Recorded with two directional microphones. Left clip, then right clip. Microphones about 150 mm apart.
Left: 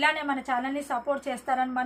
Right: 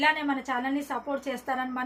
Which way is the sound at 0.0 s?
20° left (ahead or behind).